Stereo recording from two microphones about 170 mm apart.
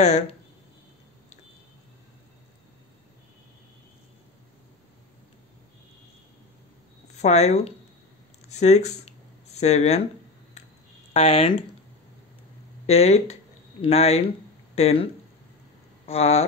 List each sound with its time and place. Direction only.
0.0 s speech: 45° left (ahead or behind)
7.2 s speech: 40° left (ahead or behind)
11.1 s speech: 35° left (ahead or behind)
12.8 s speech: 40° left (ahead or behind)
16.1 s speech: 35° left (ahead or behind)